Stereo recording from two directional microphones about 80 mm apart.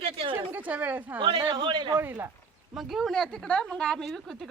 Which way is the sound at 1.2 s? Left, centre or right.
Right.